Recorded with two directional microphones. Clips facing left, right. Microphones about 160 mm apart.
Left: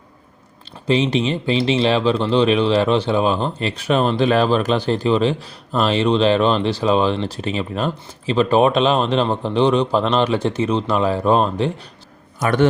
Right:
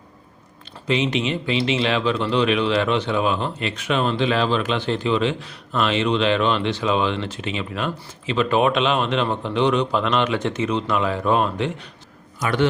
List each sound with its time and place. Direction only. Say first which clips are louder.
0.9 s speech: left 4 dB; 30° left (ahead or behind)
12.4 s a man's voice: left 4 dB; 50° left (ahead or behind)